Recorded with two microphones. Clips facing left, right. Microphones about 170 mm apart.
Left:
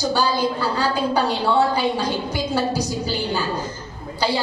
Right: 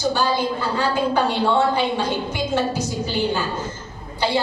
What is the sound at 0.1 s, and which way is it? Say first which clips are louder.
A woman's voice: left 1 dB; 40° left (ahead or behind).